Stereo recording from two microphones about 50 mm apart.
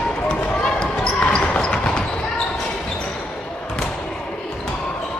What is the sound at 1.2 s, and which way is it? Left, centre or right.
Basketball bounce, centre.